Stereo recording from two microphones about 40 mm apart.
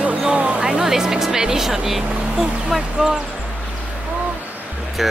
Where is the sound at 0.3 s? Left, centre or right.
Right.